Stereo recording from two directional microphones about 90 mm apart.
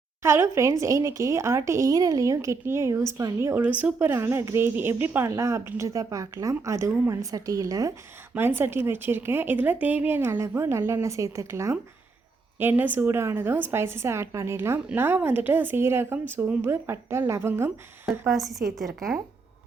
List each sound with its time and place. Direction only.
0.2 s speech: 30° right (ahead or behind)
3.4 s speech: 20° right (ahead or behind)
5.4 s speech: 35° right (ahead or behind)
8.4 s speech: 25° right (ahead or behind)
12.5 s speech: 20° right (ahead or behind)
18.0 s a woman's voice: centre (ahead or behind)